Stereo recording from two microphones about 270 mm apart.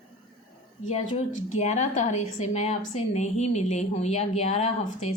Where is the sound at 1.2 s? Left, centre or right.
Left.